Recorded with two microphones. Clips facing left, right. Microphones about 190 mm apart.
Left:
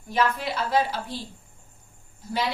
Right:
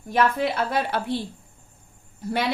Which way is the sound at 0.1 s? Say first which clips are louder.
Right 3 dB; 55° right (ahead or behind).